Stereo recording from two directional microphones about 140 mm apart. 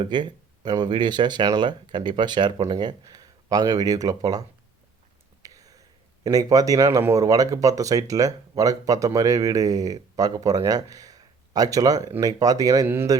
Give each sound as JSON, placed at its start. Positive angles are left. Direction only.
{"t": 0.0, "sound": "speech", "side_deg": -35}
{"t": 5.4, "sound": "a sound", "side_deg": -25}
{"t": 6.2, "sound": "speech", "side_deg": -25}